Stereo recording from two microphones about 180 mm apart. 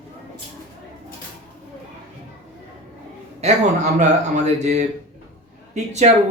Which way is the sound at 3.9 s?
40° right (ahead or behind).